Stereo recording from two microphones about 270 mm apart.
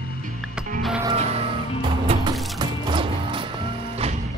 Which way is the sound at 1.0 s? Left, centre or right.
Right.